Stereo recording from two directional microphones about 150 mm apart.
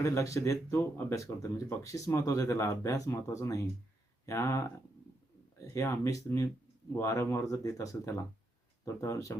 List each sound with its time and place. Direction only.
0.0 s speech: 20° left (ahead or behind)
5.7 s speech: 20° left (ahead or behind)